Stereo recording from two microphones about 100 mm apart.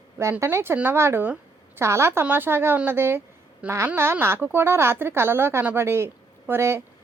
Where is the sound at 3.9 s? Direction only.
25° right (ahead or behind).